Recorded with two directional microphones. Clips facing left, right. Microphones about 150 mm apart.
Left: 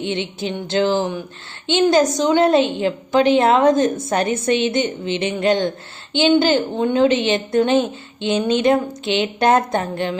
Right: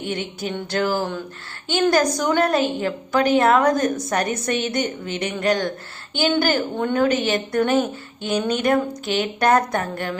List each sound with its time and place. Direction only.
0.1 s a woman's voice: 25° left (ahead or behind)